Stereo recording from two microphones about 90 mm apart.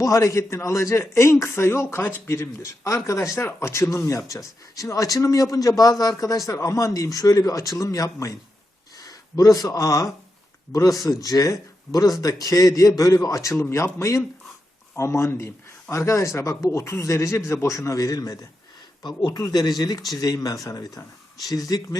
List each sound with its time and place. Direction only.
0.0 s a man's voice: 40° left (ahead or behind)